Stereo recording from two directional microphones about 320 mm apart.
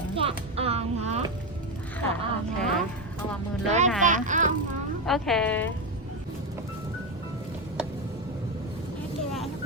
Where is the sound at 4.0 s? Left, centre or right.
Right.